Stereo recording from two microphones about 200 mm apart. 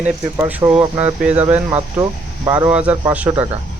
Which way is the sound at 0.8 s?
30° right (ahead or behind).